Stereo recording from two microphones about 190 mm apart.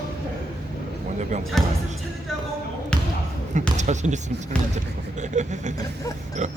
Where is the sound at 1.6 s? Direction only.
Centre (ahead or behind).